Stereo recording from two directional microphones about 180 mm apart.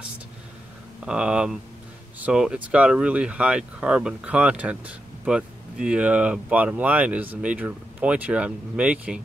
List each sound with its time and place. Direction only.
1.0 s speech: 5° right (ahead or behind)